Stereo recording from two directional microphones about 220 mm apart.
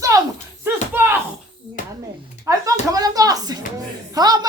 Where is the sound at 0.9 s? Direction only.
10° right (ahead or behind).